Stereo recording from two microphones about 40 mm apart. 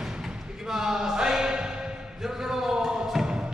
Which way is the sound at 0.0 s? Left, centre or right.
Centre.